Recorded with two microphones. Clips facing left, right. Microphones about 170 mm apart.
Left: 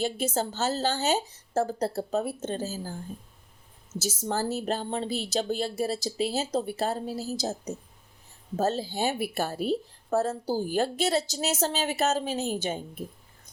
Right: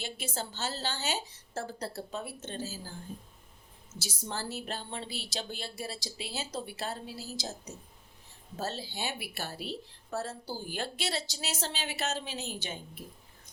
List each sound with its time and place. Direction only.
0.0 s speech: 45° left (ahead or behind)
3.9 s speech: 45° left (ahead or behind)
8.5 s speech: 45° left (ahead or behind)